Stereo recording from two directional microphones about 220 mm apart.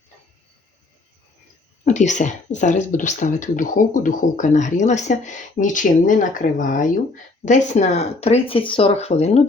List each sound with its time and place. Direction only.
1.8 s speech: 35° left (ahead or behind)